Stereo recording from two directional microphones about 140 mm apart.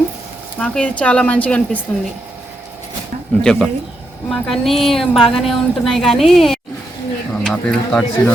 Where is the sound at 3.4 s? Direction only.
5° left (ahead or behind).